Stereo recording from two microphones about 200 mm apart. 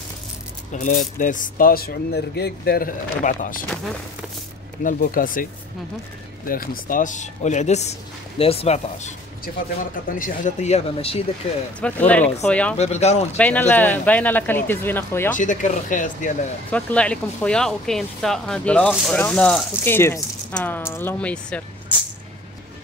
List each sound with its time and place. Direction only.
0.7 s speech: 40° left (ahead or behind)
3.7 s speech: 5° left (ahead or behind)
4.8 s speech: 45° left (ahead or behind)
11.8 s speech: 5° left (ahead or behind)
12.7 s speech: 35° left (ahead or behind)
13.4 s speech: 10° left (ahead or behind)
15.3 s speech: 40° left (ahead or behind)
16.7 s speech: 5° left (ahead or behind)